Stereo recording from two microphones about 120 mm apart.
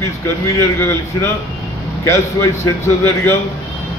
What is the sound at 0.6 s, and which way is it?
A man's voice, 20° left (ahead or behind).